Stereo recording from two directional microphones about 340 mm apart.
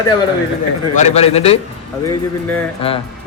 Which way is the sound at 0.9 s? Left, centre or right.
Centre.